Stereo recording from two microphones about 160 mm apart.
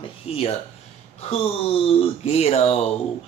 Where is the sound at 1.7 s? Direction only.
40° left (ahead or behind).